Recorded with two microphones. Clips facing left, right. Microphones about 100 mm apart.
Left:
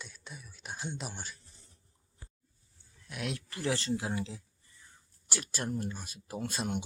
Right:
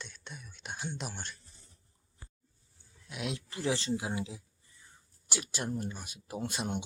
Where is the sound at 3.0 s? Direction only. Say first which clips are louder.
Even; 20° right (ahead or behind).